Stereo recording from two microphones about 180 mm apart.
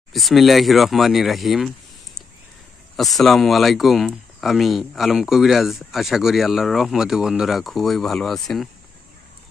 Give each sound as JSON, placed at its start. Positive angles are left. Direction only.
{"t": 0.1, "sound": "speech", "side_deg": 0}
{"t": 2.9, "sound": "speech", "side_deg": 0}